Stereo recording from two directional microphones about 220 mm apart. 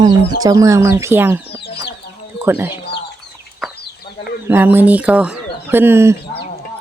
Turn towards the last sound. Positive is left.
turn(degrees=-10)  # may be behind; listen again after turning